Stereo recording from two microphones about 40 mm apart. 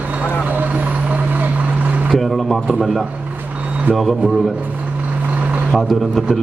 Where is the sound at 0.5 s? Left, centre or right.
Right.